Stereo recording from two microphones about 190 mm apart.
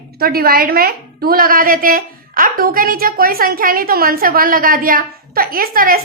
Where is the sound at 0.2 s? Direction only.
50° right (ahead or behind).